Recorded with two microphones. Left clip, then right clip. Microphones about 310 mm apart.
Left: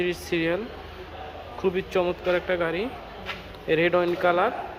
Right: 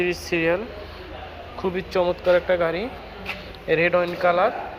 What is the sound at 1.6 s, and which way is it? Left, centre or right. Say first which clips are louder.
Speech: right 2 dB; centre.